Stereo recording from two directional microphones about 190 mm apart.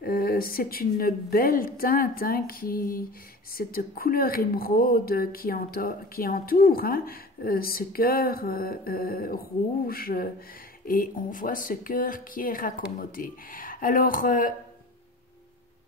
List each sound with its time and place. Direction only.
0.0 s speech: 50° left (ahead or behind)